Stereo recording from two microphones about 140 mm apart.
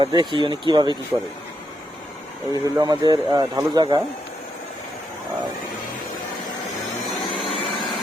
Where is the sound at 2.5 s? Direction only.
25° right (ahead or behind).